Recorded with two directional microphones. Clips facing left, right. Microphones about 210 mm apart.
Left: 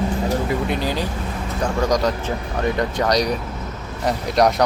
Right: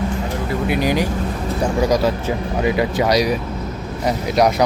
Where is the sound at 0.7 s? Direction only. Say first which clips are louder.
Right 5 dB; 15° right (ahead or behind).